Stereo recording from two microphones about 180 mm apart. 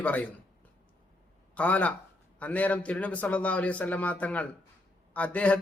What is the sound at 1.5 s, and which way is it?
A man's voice, 10° left (ahead or behind).